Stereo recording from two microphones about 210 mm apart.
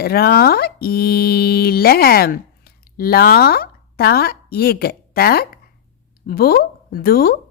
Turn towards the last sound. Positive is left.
turn(degrees=45)  # may be behind; listen again after turning